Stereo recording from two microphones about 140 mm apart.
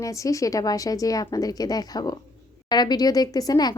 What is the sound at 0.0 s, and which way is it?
Speech, 25° left (ahead or behind).